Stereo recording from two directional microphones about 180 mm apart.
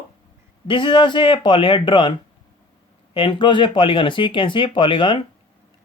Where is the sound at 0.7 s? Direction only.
25° left (ahead or behind).